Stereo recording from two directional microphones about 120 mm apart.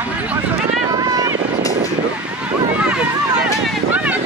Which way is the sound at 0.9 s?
30° right (ahead or behind).